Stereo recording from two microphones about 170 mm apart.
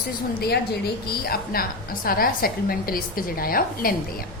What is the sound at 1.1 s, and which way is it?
A woman's voice, 60° left (ahead or behind).